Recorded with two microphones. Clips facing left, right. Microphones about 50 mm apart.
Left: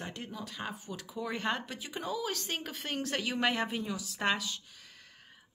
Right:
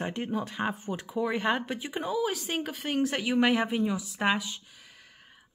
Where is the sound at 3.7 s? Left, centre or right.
Right.